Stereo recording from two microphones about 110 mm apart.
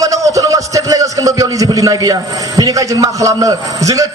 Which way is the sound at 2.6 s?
35° right (ahead or behind).